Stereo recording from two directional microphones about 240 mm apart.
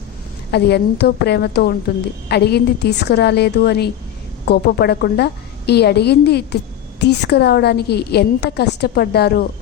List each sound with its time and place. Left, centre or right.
0.5 s a woman's voice: left